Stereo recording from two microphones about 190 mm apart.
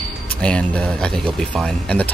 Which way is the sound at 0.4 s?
5° left (ahead or behind).